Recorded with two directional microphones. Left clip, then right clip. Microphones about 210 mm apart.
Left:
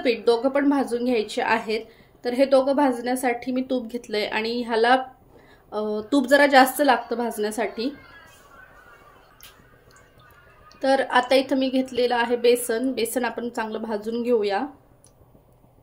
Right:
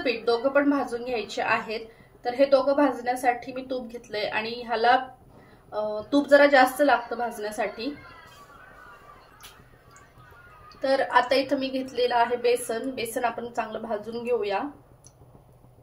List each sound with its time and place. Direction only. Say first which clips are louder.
0.0 s a woman's voice: left 4 dB; 55° left (ahead or behind)
10.8 s a woman's voice: left 2 dB; 50° left (ahead or behind)